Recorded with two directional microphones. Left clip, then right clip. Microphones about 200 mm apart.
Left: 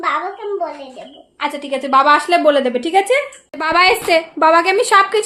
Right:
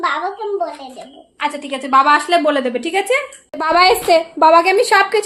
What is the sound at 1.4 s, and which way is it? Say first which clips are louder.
A woman's voice: left 1 dB; 20° left (ahead or behind).